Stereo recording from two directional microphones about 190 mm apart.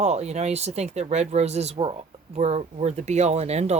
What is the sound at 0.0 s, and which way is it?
Speech, 35° right (ahead or behind).